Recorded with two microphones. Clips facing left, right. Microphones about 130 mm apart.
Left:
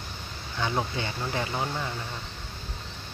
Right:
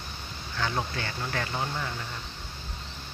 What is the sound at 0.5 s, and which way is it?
Speech, 20° left (ahead or behind).